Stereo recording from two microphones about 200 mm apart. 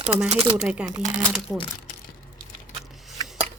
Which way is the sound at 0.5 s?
5° right (ahead or behind).